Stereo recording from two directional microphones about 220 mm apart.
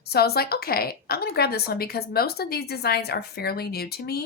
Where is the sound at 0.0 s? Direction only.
45° left (ahead or behind).